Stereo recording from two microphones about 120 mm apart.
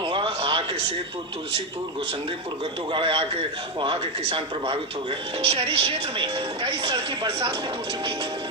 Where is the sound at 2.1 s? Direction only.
45° right (ahead or behind).